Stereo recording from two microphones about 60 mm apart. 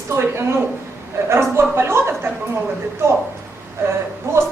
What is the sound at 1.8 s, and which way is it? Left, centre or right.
A woman's voice, right.